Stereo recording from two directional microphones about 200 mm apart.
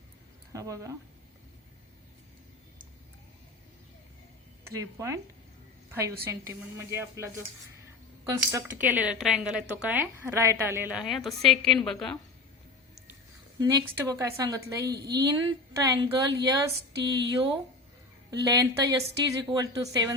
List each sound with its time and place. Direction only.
0.5 s a woman's voice: 15° right (ahead or behind)
4.8 s a woman's voice: 15° right (ahead or behind)
10.9 s a woman's voice: centre (ahead or behind)
13.6 s a woman's voice: 15° right (ahead or behind)
14.9 s a woman's voice: 55° right (ahead or behind)
15.2 s a woman's voice: 20° right (ahead or behind)